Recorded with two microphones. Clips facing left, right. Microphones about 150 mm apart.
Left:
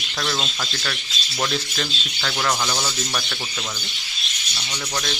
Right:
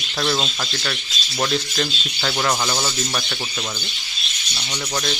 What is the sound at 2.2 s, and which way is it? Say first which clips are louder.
Speech: right 2 dB; 10° right (ahead or behind).